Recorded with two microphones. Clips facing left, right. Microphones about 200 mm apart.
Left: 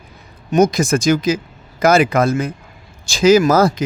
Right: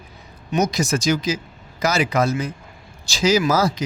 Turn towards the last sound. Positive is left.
turn(degrees=55)  # may be behind; listen again after turning